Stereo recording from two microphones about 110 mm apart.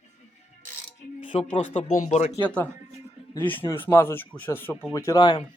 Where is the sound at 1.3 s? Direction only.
75° left (ahead or behind).